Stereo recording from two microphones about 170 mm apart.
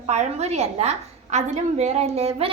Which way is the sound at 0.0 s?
40° right (ahead or behind).